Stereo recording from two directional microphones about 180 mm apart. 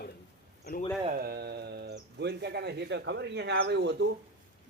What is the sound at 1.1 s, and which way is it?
Bird, 60° right (ahead or behind).